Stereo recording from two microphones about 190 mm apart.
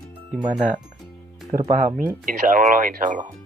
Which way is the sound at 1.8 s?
45° right (ahead or behind).